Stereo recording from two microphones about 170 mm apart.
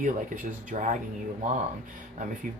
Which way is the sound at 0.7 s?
45° right (ahead or behind).